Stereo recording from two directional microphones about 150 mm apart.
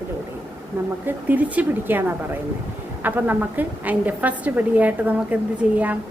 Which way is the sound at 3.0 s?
10° right (ahead or behind).